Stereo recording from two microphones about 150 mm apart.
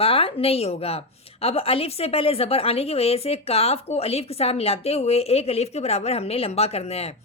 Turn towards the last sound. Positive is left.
turn(degrees=45)  # may be behind; listen again after turning